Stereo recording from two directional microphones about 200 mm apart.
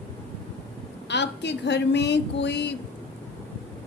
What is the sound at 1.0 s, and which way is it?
A woman's voice, 60° left (ahead or behind).